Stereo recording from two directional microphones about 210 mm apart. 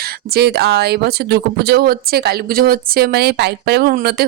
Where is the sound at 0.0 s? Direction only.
50° right (ahead or behind).